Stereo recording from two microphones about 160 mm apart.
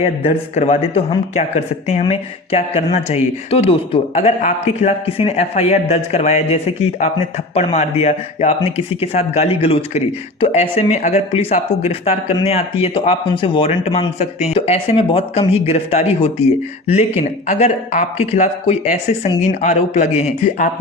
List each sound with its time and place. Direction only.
0.0 s speech: 40° left (ahead or behind)